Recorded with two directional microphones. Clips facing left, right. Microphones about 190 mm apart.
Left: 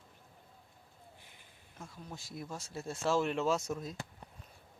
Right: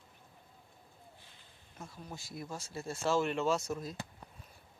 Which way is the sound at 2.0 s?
Centre (ahead or behind).